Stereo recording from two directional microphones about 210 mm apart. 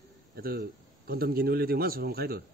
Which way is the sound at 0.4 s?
45° right (ahead or behind).